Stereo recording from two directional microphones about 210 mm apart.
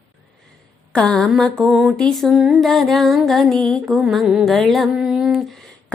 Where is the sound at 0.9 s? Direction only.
5° left (ahead or behind).